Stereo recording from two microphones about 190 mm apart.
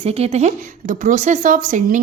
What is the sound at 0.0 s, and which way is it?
Speech, 30° right (ahead or behind).